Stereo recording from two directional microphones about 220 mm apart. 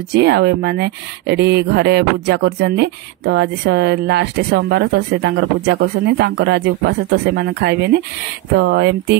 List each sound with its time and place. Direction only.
0.1 s speech: 50° right (ahead or behind)